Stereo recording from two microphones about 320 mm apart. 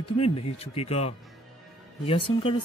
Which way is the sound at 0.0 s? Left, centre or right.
Centre.